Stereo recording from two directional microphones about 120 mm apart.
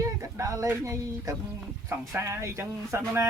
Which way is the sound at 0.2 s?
25° right (ahead or behind).